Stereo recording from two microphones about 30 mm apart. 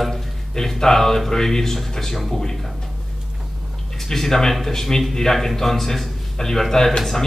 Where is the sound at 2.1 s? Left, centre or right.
Centre.